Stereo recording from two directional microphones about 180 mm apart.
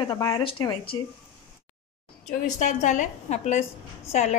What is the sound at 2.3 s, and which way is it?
A woman's voice, 45° left (ahead or behind).